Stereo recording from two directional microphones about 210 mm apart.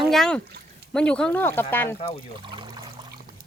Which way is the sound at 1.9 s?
30° left (ahead or behind).